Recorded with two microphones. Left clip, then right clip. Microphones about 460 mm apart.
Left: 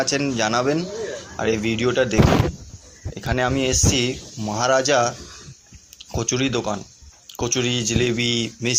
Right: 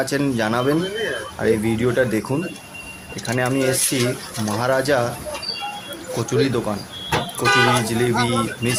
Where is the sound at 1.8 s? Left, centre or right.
Right.